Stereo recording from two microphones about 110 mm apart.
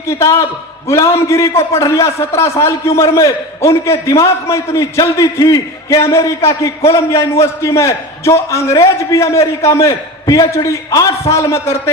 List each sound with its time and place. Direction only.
0.1 s a man's voice: 25° left (ahead or behind)